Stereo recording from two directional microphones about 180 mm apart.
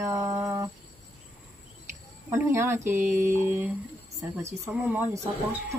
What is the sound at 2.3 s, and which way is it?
Speech, 15° right (ahead or behind).